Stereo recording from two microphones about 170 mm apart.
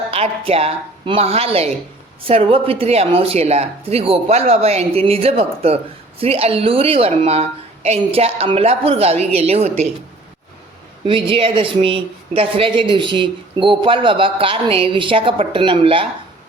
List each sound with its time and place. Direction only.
0.1 s speech: 35° right (ahead or behind)
11.0 s speech: 30° right (ahead or behind)